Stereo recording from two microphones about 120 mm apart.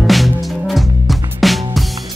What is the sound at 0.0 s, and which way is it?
Music, centre (ahead or behind).